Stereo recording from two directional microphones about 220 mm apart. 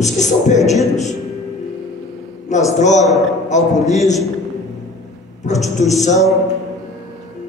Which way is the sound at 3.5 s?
30° left (ahead or behind).